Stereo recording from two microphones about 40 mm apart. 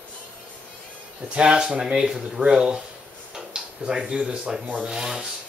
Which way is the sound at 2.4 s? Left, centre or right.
Right.